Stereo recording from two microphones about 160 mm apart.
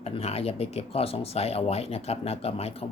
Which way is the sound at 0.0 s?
40° left (ahead or behind).